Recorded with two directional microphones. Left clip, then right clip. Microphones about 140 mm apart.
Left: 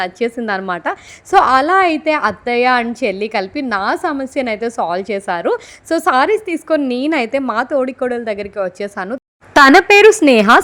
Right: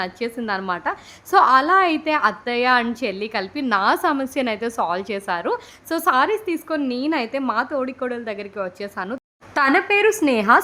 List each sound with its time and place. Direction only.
0.0 s a woman's voice: 25° left (ahead or behind)
9.5 s speech: 60° left (ahead or behind); by 10.6 s 45° left (ahead or behind)